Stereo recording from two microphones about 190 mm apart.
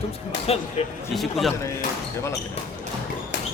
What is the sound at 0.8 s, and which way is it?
Speech, 30° left (ahead or behind).